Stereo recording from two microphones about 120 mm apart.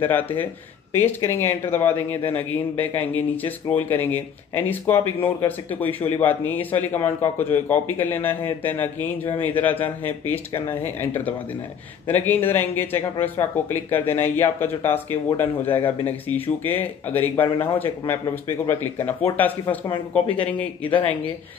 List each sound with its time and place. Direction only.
0.0 s speech: 15° left (ahead or behind)
12.1 s speech: 15° left (ahead or behind)
20.2 s speech: 10° left (ahead or behind)